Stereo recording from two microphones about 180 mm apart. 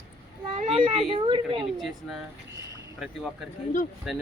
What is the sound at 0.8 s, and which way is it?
Speech, 30° right (ahead or behind).